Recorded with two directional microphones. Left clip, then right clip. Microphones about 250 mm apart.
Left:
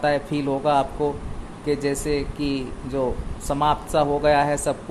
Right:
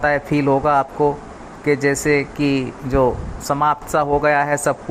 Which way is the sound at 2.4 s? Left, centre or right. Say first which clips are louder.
Right 7 dB; right.